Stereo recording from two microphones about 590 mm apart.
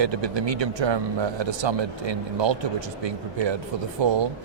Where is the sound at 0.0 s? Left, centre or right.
Right.